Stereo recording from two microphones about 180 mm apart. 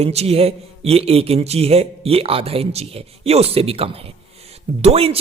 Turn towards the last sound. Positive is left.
turn(degrees=-35)  # may be behind; listen again after turning